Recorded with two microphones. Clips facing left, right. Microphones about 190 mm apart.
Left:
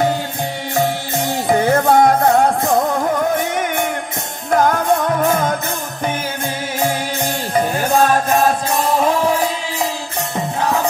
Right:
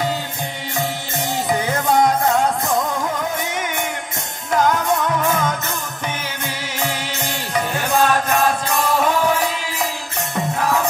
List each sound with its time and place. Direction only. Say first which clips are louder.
0.7 s music: left 6 dB; 55° left (ahead or behind)
7.5 s music: left 4 dB; 40° left (ahead or behind)